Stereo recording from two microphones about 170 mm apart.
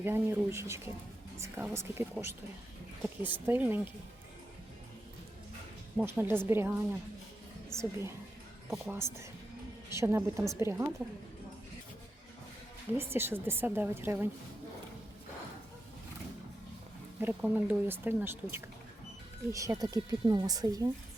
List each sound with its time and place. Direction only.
0.0 s speech: 15° right (ahead or behind)
6.0 s speech: 10° right (ahead or behind)
13.0 s speech: 15° right (ahead or behind)
17.2 s speech: 10° right (ahead or behind)